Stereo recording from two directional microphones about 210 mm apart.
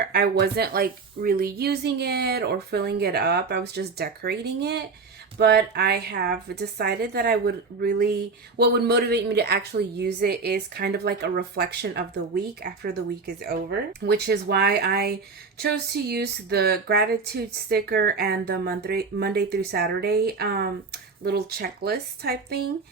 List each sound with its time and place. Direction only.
0.1 s speech: 45° right (ahead or behind)